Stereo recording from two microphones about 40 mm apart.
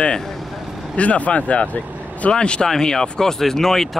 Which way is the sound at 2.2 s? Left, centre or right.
Left.